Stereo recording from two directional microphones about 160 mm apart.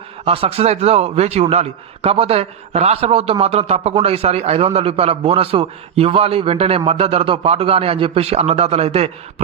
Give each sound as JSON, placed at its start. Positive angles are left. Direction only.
{"t": 0.3, "sound": "a man's voice", "side_deg": -40}